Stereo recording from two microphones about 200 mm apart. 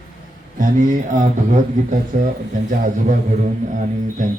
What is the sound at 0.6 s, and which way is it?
A man's voice, 40° right (ahead or behind).